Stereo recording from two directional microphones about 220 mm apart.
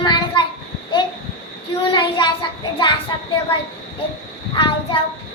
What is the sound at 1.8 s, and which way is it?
A child's voice, 20° left (ahead or behind).